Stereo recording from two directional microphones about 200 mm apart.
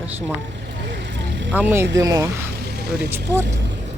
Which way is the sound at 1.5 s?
10° right (ahead or behind).